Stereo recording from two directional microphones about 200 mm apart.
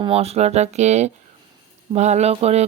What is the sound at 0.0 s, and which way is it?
Speech, 30° right (ahead or behind).